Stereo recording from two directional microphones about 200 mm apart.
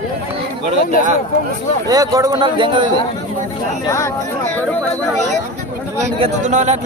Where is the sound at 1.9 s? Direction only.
20° right (ahead or behind).